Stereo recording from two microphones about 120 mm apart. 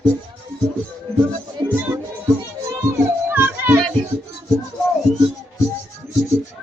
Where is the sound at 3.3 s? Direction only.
15° right (ahead or behind).